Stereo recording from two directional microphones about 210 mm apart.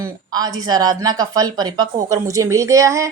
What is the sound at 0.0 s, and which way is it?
A woman's voice, 20° right (ahead or behind).